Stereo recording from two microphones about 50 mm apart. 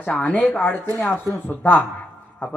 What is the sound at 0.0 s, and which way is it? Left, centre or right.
Speech, left.